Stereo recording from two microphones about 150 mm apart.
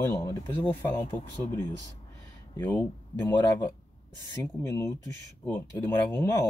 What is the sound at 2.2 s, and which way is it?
Speech, 15° left (ahead or behind).